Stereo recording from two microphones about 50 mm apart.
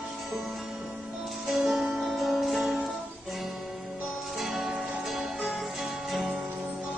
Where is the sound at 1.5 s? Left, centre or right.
Centre.